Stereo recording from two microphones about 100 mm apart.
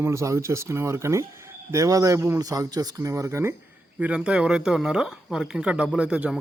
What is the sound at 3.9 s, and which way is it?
Speech, 15° right (ahead or behind).